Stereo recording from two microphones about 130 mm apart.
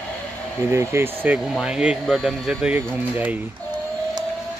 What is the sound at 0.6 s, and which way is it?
Speech, 20° right (ahead or behind).